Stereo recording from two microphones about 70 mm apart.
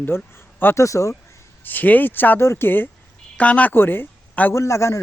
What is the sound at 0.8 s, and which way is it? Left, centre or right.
Speech, left.